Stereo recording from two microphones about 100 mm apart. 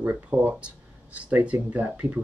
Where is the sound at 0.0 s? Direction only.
15° right (ahead or behind).